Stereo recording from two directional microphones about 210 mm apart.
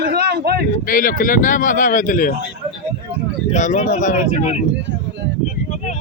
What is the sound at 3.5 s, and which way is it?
Speech, 35° left (ahead or behind).